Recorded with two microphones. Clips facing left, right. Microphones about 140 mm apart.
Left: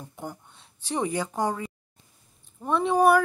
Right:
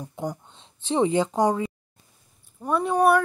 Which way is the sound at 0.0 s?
15° right (ahead or behind).